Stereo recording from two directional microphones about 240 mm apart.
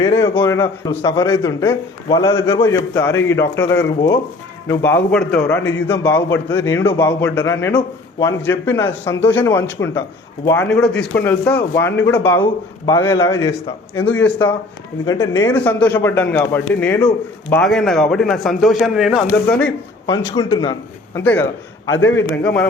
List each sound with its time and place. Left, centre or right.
0.0 s a man's voice: centre
20.1 s a man's voice: centre
21.2 s a man's voice: centre